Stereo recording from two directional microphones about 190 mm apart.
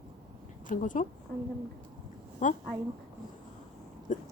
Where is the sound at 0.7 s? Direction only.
45° left (ahead or behind).